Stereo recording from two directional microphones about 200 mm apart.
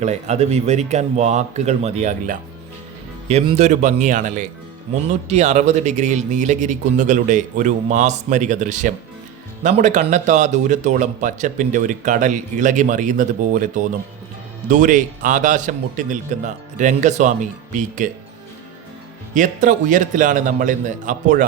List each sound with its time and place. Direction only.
0.0 s speech: 35° right (ahead or behind)
19.3 s speech: 40° right (ahead or behind)